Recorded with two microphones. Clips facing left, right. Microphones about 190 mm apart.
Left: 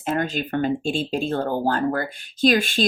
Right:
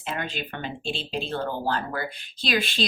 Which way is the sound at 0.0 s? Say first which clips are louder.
Left 8 dB; 45° left (ahead or behind).